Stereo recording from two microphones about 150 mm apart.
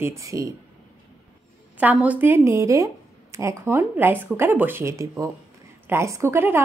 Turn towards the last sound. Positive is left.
turn(degrees=-15)  # may be behind; listen again after turning